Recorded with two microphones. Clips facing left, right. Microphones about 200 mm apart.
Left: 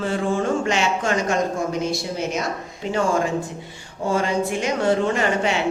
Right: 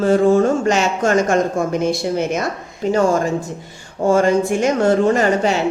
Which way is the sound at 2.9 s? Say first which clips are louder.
Right 4 dB; 40° right (ahead or behind).